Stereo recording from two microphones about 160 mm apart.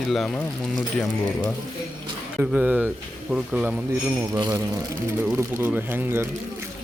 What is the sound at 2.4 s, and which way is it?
Speech, 10° right (ahead or behind).